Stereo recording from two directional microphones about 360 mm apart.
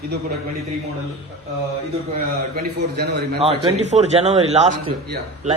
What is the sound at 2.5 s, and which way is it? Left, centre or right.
A man's voice, right.